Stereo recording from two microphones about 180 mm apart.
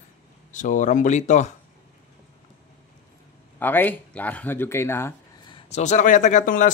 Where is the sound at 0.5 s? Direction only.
45° left (ahead or behind).